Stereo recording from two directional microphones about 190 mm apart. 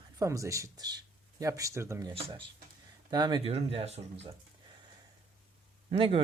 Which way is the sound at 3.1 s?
20° right (ahead or behind).